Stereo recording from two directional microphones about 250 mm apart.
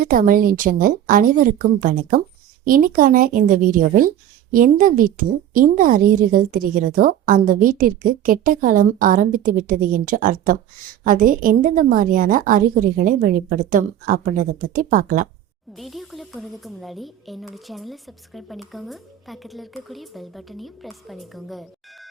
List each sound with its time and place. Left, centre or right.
0.0 s a woman's voice: right
15.7 s speech: centre